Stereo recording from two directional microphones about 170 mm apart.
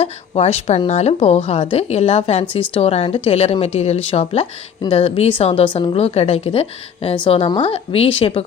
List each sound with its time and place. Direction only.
0.0 s a woman's voice: 35° left (ahead or behind)